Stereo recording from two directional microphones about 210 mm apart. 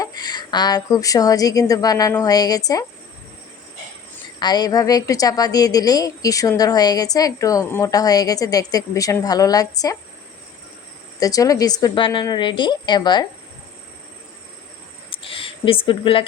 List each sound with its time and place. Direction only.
0.0 s a woman's voice: 20° left (ahead or behind)
4.4 s a woman's voice: 20° left (ahead or behind)
11.2 s a woman's voice: 15° left (ahead or behind)
15.1 s a sound: 25° left (ahead or behind)